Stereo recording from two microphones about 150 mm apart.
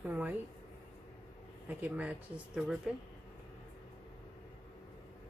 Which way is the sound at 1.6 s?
10° right (ahead or behind).